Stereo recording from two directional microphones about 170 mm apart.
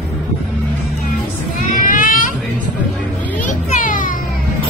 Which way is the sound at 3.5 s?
50° left (ahead or behind).